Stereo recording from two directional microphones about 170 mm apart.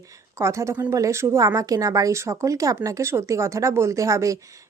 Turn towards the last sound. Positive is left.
turn(degrees=-20)  # may be behind; listen again after turning